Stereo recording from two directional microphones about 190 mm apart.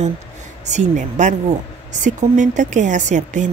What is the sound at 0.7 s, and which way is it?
A woman's voice, 40° right (ahead or behind).